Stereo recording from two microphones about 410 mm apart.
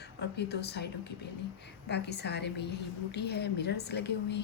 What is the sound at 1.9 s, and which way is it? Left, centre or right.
A woman's voice, left.